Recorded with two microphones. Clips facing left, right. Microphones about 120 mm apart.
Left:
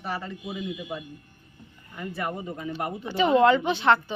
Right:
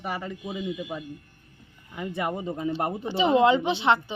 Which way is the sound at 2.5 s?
30° right (ahead or behind).